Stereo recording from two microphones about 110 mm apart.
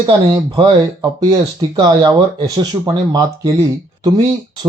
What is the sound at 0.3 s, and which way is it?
Speech, 35° right (ahead or behind).